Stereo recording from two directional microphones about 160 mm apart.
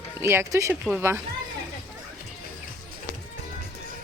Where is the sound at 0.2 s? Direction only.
15° right (ahead or behind).